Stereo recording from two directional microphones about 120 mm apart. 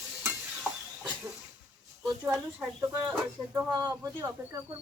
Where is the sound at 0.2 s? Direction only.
5° right (ahead or behind).